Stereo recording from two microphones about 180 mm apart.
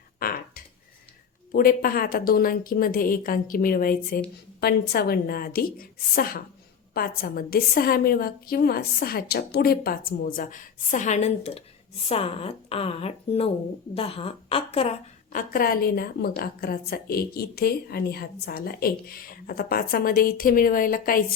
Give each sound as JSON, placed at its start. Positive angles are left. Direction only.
{"t": 0.2, "sound": "a sound", "side_deg": 55}
{"t": 1.5, "sound": "a woman's voice", "side_deg": 55}
{"t": 15.3, "sound": "a woman's voice", "side_deg": 50}